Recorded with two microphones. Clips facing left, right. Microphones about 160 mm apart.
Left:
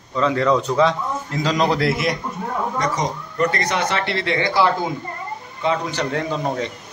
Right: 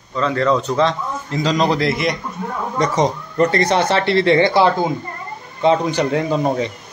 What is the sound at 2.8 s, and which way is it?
Speech, 25° right (ahead or behind).